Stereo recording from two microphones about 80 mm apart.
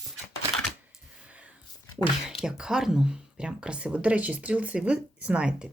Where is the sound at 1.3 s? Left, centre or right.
Centre.